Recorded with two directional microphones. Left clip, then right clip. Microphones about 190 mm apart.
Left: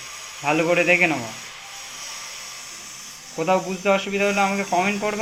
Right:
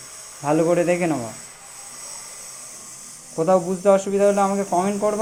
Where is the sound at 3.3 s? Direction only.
35° right (ahead or behind).